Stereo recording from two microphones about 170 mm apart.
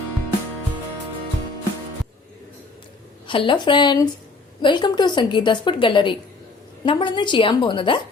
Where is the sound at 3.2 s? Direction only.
30° left (ahead or behind).